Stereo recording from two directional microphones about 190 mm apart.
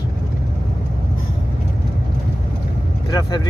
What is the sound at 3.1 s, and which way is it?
Speech, 20° left (ahead or behind).